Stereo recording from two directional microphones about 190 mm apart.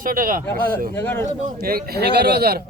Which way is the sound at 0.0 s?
45° right (ahead or behind).